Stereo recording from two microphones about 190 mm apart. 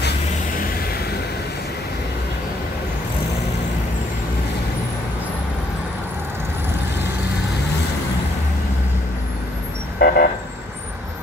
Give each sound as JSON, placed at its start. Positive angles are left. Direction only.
{"t": 9.9, "sound": "vehicle", "side_deg": 55}